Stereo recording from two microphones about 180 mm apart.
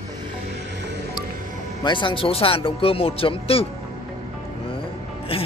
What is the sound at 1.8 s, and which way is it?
Speech, 25° left (ahead or behind).